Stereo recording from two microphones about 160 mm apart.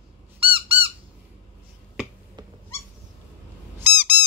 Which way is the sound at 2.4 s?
25° right (ahead or behind).